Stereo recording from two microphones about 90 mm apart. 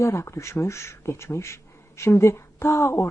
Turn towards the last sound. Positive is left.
turn(degrees=30)  # may be behind; listen again after turning